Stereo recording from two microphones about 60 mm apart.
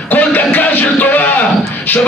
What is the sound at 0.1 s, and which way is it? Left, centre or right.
Music, left.